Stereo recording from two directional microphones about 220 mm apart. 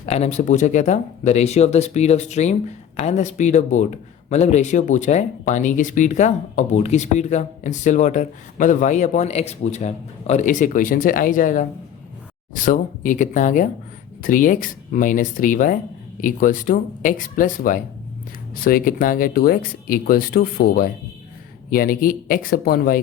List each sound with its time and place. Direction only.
0.0 s speech: 30° left (ahead or behind)
12.6 s speech: 35° left (ahead or behind)